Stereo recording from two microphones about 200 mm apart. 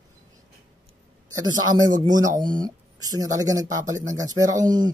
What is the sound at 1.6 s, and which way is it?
Speech, 20° right (ahead or behind).